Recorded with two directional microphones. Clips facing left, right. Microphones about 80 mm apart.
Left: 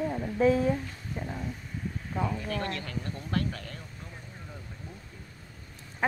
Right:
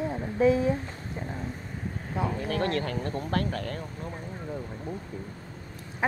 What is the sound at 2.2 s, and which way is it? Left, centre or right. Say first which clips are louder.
Speech: right 4 dB; right.